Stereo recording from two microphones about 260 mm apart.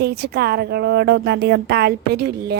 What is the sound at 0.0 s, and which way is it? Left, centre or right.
A woman's voice, right.